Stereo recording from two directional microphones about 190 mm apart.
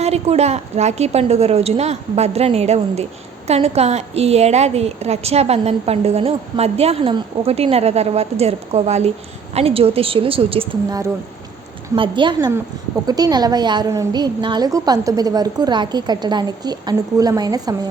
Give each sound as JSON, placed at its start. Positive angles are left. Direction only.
{"t": 0.0, "sound": "a woman's voice", "side_deg": -35}